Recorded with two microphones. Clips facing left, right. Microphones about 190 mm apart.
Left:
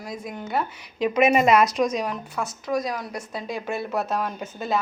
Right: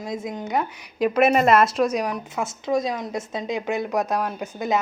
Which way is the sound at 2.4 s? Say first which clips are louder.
Right 3 dB; 25° right (ahead or behind).